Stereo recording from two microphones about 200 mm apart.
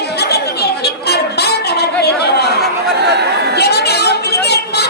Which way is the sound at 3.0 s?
55° right (ahead or behind).